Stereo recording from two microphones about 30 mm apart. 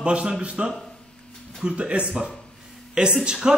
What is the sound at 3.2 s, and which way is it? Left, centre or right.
Speech, right.